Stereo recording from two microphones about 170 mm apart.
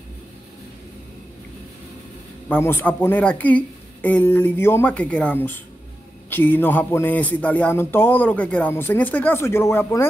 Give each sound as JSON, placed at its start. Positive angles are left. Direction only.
{"t": 2.4, "sound": "speech", "side_deg": 10}